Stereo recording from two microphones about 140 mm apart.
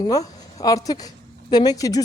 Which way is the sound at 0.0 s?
25° left (ahead or behind).